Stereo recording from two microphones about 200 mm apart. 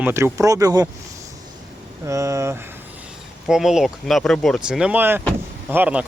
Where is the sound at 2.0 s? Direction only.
15° right (ahead or behind).